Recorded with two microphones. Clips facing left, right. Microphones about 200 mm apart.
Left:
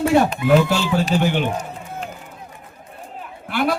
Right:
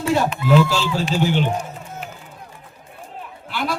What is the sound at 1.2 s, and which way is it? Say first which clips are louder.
Speech: even; 60° left (ahead or behind).